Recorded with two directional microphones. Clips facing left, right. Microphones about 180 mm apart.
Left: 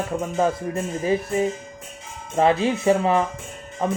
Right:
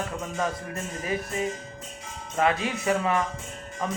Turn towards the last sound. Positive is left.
turn(degrees=30)  # may be behind; listen again after turning